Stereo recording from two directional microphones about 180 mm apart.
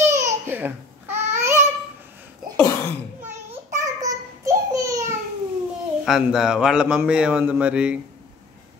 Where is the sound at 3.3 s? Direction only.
40° right (ahead or behind).